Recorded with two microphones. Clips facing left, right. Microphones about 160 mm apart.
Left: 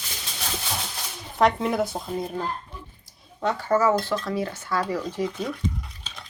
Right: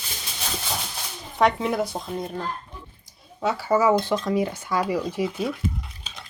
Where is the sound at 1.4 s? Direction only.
Centre (ahead or behind).